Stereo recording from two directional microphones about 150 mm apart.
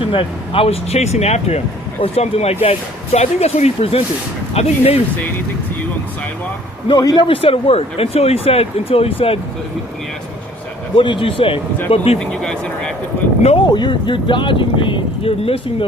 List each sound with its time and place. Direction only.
0.0 s speech: 35° left (ahead or behind)
6.8 s speech: 25° left (ahead or behind)
10.9 s speech: 35° left (ahead or behind)
12.2 s speech: 5° left (ahead or behind)
13.7 s speech: 30° left (ahead or behind)